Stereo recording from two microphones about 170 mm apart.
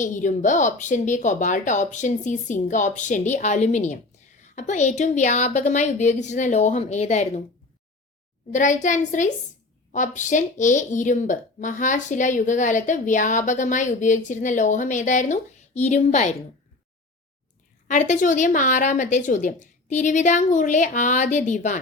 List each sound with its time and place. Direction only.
0.0 s a woman's voice: 45° left (ahead or behind)
8.5 s a woman's voice: 45° left (ahead or behind)
17.8 s a woman's voice: 45° left (ahead or behind)